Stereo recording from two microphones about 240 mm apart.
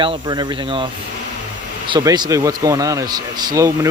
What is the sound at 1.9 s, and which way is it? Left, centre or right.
Speech, centre.